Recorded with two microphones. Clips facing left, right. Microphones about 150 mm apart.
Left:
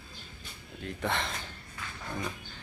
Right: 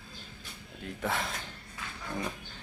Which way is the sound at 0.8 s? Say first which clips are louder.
Left 1 dB; 5° right (ahead or behind).